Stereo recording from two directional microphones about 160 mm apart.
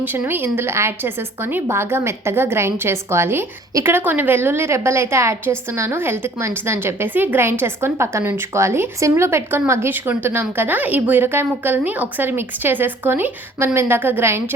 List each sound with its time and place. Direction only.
0.0 s speech: 10° right (ahead or behind)